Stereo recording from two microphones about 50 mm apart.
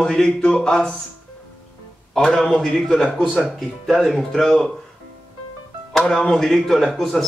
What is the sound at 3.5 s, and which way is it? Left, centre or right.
Speech, centre.